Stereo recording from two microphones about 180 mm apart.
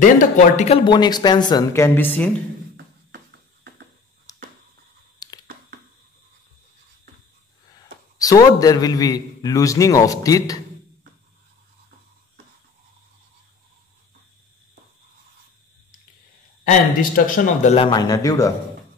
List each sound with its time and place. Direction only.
0.0 s speech: 45° left (ahead or behind)
0.8 s speech: 25° left (ahead or behind)
4.3 s finger snapping: 20° left (ahead or behind)
5.2 s a sound: 20° left (ahead or behind)
7.7 s a man's voice: 20° left (ahead or behind)
16.6 s speech: 50° left (ahead or behind)
17.7 s speech: 25° left (ahead or behind)